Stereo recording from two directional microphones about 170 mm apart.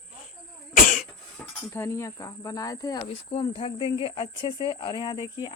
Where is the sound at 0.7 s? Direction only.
50° left (ahead or behind).